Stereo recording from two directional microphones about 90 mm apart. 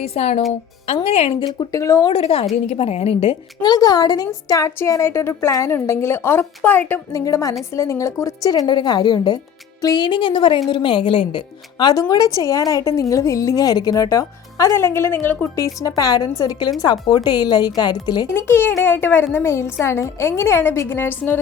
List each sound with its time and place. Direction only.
0.0 s a woman's voice: 90° left
1.5 s a woman's voice: 40° left (ahead or behind)
2.0 s a woman's voice: 90° left
3.6 s a woman's voice: 45° left (ahead or behind); by 7.0 s 20° left (ahead or behind)
7.1 s a woman's voice: 35° left (ahead or behind); by 11.9 s 70° left (ahead or behind)
11.9 s a woman's voice: 45° left (ahead or behind); by 15.4 s 25° left (ahead or behind)
15.5 s a woman's voice: 40° left (ahead or behind)
18.3 s a woman's voice: 25° left (ahead or behind)